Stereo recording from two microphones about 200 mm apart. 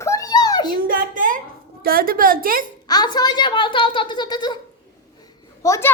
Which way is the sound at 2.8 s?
20° left (ahead or behind).